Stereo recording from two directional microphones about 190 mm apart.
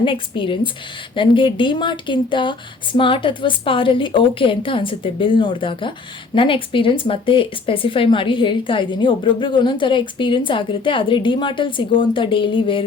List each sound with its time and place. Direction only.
0.0 s speech: 25° left (ahead or behind)